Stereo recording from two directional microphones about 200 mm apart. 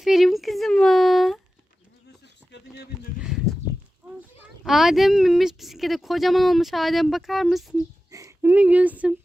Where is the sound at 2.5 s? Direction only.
55° left (ahead or behind).